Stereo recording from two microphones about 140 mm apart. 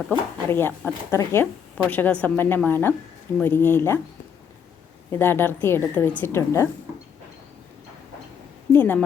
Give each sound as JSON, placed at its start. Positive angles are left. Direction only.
{"t": 0.1, "sound": "a woman's voice", "side_deg": 10}
{"t": 5.1, "sound": "a woman's voice", "side_deg": 15}
{"t": 8.7, "sound": "a woman's voice", "side_deg": 15}